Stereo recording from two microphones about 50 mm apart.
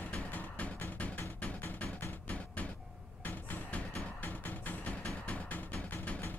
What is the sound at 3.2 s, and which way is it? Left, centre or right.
Music, left.